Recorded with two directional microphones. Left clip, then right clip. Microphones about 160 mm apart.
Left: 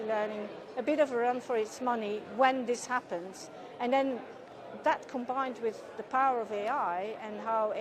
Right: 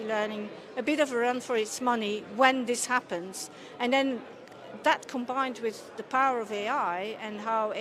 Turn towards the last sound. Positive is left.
turn(degrees=-20)  # may be behind; listen again after turning